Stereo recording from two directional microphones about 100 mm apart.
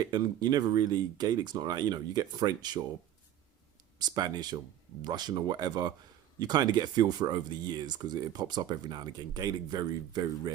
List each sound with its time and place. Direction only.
0.1 s speech: 45° right (ahead or behind)
3.9 s speech: 45° right (ahead or behind)